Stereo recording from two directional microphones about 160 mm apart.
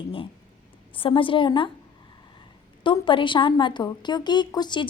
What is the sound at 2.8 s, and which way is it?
A woman's voice, 30° left (ahead or behind).